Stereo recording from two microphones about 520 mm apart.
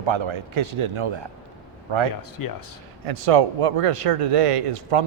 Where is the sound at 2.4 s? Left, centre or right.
Left.